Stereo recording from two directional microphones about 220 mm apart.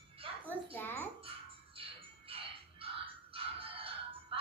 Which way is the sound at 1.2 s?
25° right (ahead or behind).